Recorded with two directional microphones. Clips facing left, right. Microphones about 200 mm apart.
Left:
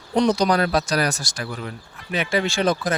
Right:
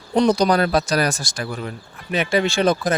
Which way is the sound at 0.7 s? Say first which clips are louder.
Right 2 dB; 45° right (ahead or behind).